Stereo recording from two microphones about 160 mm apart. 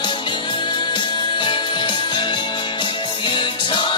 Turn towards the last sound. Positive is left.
turn(degrees=30)  # may be behind; listen again after turning